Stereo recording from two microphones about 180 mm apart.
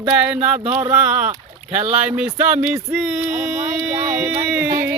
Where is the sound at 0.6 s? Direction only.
35° right (ahead or behind).